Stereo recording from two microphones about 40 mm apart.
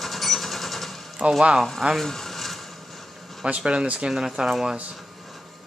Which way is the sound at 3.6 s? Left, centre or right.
Right.